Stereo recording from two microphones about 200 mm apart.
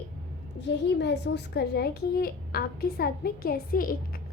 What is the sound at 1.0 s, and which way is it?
A woman's voice, 60° left (ahead or behind).